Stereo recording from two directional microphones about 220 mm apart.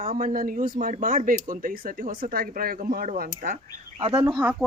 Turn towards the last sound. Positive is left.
turn(degrees=-15)  # may be behind; listen again after turning